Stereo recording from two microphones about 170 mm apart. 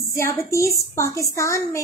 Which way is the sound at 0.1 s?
15° left (ahead or behind).